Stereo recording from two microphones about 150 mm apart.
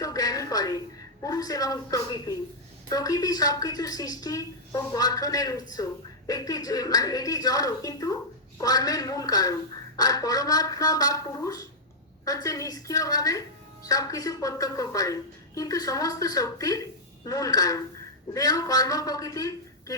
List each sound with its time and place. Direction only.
0.0 s music: 25° left (ahead or behind)
1.2 s a woman's voice: 25° left (ahead or behind)